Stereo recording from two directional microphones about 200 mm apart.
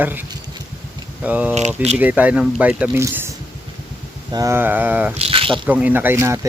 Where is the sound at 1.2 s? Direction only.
5° right (ahead or behind).